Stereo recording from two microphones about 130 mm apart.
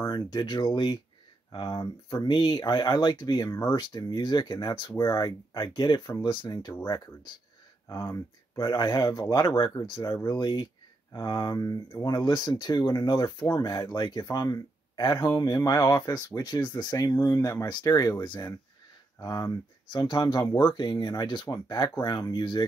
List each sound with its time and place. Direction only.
0.0 s speech: 30° left (ahead or behind)
7.9 s speech: 30° left (ahead or behind)